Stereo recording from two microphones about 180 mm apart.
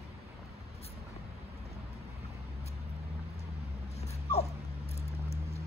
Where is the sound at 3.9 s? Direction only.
35° left (ahead or behind).